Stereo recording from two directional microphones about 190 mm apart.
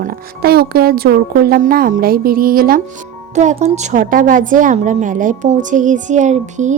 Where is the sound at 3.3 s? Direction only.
35° right (ahead or behind).